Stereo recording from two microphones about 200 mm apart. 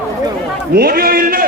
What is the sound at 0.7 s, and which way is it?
Speech, 50° right (ahead or behind).